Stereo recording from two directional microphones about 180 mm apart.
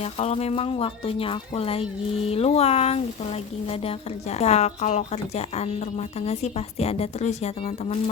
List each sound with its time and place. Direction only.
0.0 s a woman's voice: 35° left (ahead or behind)